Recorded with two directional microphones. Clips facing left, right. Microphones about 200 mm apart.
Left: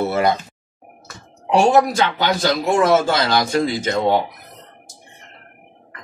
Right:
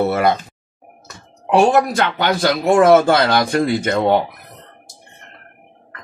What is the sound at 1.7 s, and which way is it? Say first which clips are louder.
Speech: even; 60° right (ahead or behind).